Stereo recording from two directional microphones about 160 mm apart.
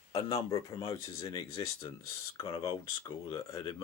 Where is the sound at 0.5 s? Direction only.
20° left (ahead or behind).